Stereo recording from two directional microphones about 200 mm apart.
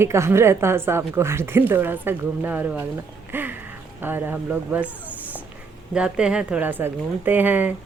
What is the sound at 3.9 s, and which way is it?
A woman's voice, 10° right (ahead or behind).